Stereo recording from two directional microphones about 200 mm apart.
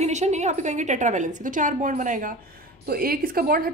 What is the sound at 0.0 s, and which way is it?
A woman's voice, 35° right (ahead or behind).